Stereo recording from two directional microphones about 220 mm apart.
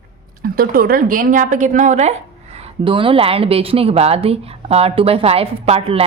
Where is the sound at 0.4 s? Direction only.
40° right (ahead or behind).